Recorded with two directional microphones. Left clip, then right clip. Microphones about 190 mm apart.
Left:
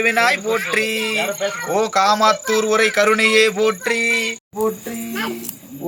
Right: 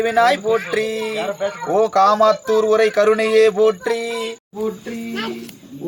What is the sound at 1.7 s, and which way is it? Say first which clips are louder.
Speech: right 2 dB; 50° right (ahead or behind).